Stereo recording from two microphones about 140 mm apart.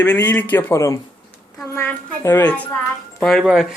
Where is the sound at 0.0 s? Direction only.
15° left (ahead or behind).